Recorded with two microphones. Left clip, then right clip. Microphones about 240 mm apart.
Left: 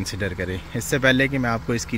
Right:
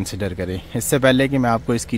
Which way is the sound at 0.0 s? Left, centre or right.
Centre.